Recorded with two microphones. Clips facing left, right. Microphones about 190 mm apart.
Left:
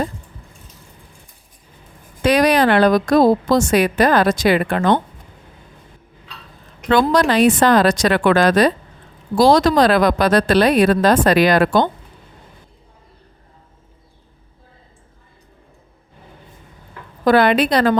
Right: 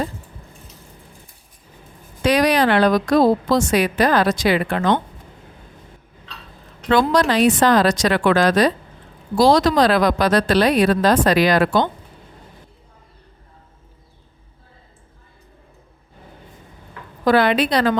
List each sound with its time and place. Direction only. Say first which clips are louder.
2.2 s a woman's voice: left 2 dB; 50° left (ahead or behind)
6.9 s a woman's voice: left 2 dB; 55° left (ahead or behind)
17.2 s a woman's voice: left 2 dB; 50° left (ahead or behind)